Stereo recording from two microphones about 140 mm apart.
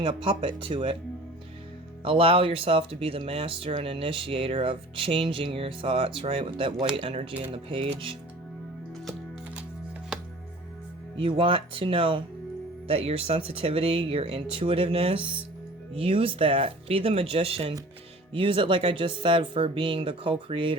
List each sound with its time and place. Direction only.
0.0 s speech: 40° right (ahead or behind)
2.0 s speech: 40° right (ahead or behind)
11.2 s speech: 40° right (ahead or behind)